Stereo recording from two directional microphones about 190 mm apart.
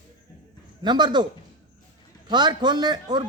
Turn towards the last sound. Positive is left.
turn(degrees=-20)  # may be behind; listen again after turning